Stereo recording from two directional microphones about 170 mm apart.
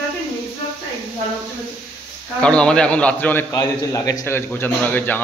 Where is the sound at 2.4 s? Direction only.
5° left (ahead or behind).